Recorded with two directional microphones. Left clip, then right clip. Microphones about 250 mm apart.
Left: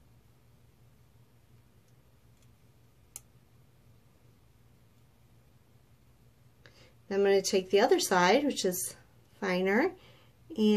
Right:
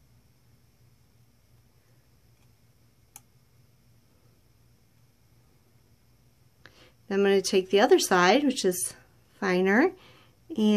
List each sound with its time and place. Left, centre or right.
6.6 s speech: right